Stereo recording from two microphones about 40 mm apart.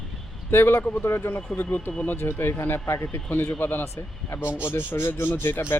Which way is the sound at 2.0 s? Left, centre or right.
Left.